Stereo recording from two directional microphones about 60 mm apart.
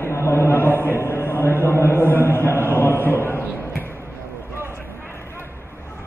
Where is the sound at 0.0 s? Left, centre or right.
Left.